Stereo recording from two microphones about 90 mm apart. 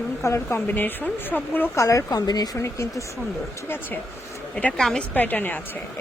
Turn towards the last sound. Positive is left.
turn(degrees=20)  # may be behind; listen again after turning